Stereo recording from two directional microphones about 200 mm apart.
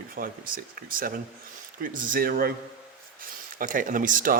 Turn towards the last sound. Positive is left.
turn(degrees=-45)  # may be behind; listen again after turning